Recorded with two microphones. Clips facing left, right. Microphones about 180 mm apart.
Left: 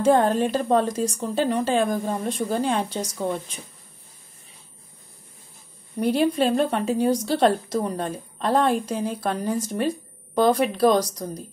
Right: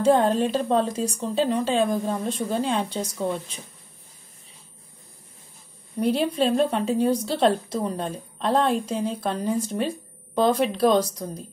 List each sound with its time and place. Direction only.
0.0 s a woman's voice: centre (ahead or behind)
5.9 s a woman's voice: centre (ahead or behind)